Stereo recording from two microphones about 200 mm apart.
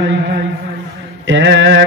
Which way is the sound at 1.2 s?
65° right (ahead or behind).